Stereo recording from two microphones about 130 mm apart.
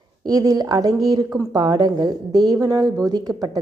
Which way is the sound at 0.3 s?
30° right (ahead or behind).